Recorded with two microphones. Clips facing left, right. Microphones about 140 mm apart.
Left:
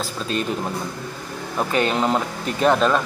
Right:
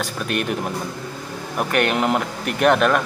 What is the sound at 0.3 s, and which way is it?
Speech, 65° right (ahead or behind).